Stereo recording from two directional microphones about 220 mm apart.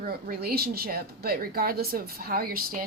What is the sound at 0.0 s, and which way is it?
A woman's voice, 45° right (ahead or behind).